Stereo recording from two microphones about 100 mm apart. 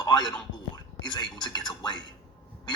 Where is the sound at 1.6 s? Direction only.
45° left (ahead or behind).